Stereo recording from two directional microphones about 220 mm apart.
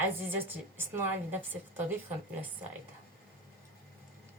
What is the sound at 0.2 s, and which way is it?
Speech, 10° right (ahead or behind).